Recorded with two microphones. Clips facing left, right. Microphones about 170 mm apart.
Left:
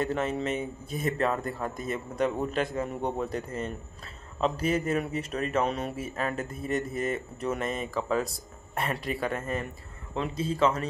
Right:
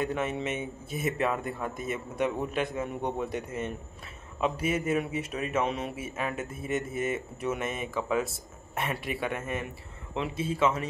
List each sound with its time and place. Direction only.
0.3 s speech: 5° right (ahead or behind)
3.3 s speech: 20° right (ahead or behind)
4.4 s speech: centre (ahead or behind)